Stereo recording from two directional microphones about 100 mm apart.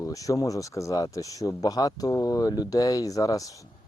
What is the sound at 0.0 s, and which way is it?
Speech, 35° left (ahead or behind).